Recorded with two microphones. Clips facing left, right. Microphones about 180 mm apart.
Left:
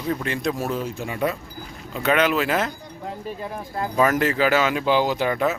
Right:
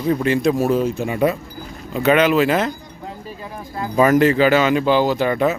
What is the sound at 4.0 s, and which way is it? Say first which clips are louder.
Speech: right 6 dB; centre (ahead or behind).